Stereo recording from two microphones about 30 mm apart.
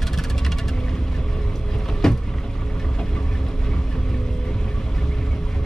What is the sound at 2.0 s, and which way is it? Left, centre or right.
Vehicle, centre.